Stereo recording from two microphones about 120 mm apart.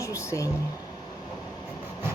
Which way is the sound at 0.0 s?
25° left (ahead or behind).